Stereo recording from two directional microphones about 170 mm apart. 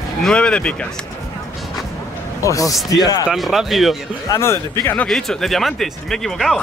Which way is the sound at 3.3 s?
Centre (ahead or behind).